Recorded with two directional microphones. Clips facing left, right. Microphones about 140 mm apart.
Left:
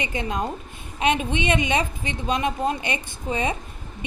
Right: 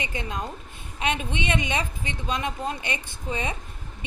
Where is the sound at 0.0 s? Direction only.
20° left (ahead or behind).